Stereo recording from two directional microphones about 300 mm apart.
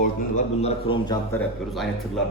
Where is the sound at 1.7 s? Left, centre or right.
Centre.